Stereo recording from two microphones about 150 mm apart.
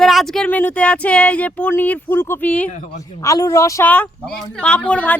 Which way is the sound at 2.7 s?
50° left (ahead or behind).